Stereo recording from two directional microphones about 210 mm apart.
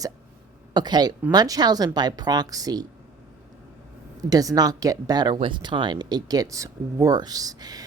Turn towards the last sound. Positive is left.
turn(degrees=-20)  # may be behind; listen again after turning